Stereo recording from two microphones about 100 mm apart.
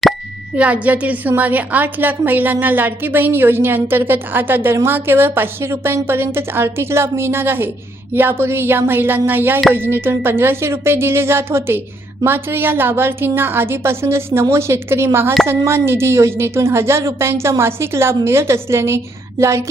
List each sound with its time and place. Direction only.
0.5 s a woman's voice: 15° right (ahead or behind)